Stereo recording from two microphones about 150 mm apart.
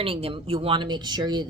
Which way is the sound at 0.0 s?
40° right (ahead or behind).